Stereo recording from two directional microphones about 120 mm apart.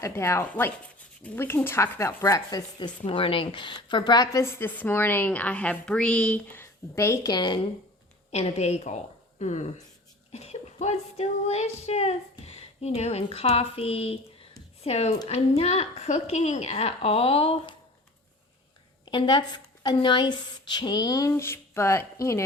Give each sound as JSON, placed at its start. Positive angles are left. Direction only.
{"t": 0.0, "sound": "a woman's voice", "side_deg": 25}
{"t": 3.0, "sound": "a woman's voice", "side_deg": 50}
{"t": 8.3, "sound": "a woman's voice", "side_deg": 60}
{"t": 19.1, "sound": "a woman's voice", "side_deg": 40}